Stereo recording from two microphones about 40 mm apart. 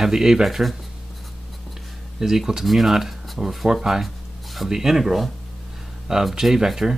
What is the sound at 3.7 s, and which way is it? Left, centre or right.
Speech, centre.